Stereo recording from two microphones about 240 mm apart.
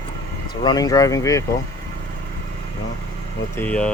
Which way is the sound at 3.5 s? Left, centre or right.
Centre.